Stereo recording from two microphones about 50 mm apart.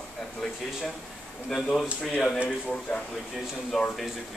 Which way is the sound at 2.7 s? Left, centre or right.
Left.